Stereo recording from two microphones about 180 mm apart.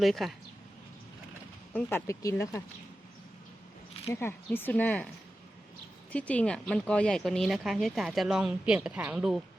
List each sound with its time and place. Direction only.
0.0 s speech: centre (ahead or behind)
1.7 s speech: 10° left (ahead or behind)
4.1 s speech: 15° left (ahead or behind)
6.1 s speech: 5° left (ahead or behind)